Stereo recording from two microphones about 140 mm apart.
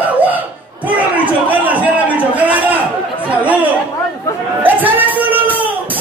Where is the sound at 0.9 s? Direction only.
10° right (ahead or behind).